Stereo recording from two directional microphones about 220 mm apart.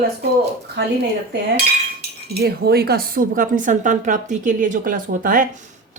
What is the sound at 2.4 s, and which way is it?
A woman's voice, 45° right (ahead or behind).